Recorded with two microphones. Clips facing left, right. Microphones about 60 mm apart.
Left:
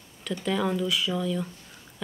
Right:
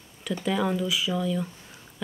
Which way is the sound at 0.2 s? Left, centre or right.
Centre.